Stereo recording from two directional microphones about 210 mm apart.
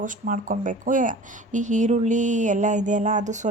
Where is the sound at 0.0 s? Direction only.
40° right (ahead or behind).